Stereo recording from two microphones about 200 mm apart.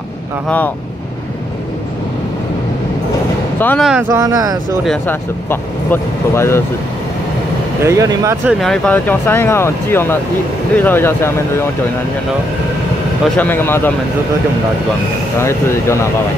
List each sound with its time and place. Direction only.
3.5 s speech: 10° left (ahead or behind)
4.1 s speech: 15° right (ahead or behind)
4.8 s speech: 10° left (ahead or behind)
7.8 s speech: 15° right (ahead or behind)
8.5 s speech: centre (ahead or behind)
13.2 s speech: 10° left (ahead or behind)
15.3 s speech: 15° left (ahead or behind)